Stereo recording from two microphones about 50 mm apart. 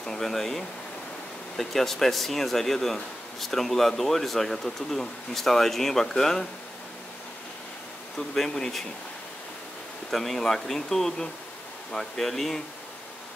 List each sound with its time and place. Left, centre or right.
0.0 s speech: centre
8.5 s speech: centre
10.1 s speech: centre